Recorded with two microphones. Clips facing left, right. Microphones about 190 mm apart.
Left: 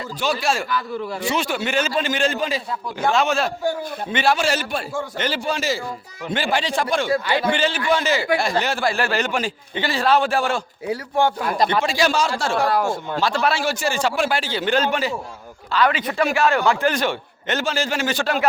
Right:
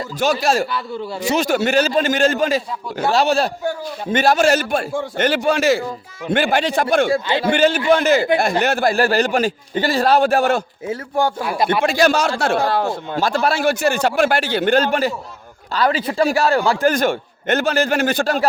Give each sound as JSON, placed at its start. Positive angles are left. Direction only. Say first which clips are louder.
{"t": 0.2, "sound": "a man's voice", "louder": "right 5 dB", "side_deg": -40}
{"t": 7.1, "sound": "speech", "louder": "right 2 dB", "side_deg": -25}
{"t": 7.9, "sound": "a man's voice", "louder": "right 5 dB", "side_deg": -55}
{"t": 11.4, "sound": "speech", "louder": "even", "side_deg": -10}
{"t": 11.7, "sound": "a man's voice", "louder": "right 4 dB", "side_deg": -55}
{"t": 12.5, "sound": "speech", "louder": "right 1 dB", "side_deg": -25}
{"t": 13.1, "sound": "a man's voice", "louder": "right 3 dB", "side_deg": -50}
{"t": 15.7, "sound": "a man's voice", "louder": "right 1 dB", "side_deg": -35}